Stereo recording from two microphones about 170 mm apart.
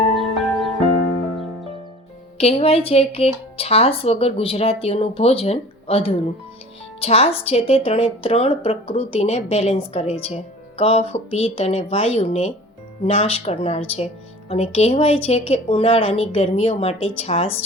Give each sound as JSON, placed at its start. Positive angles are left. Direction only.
{"t": 0.1, "sound": "music", "side_deg": 0}
{"t": 2.4, "sound": "speech", "side_deg": 35}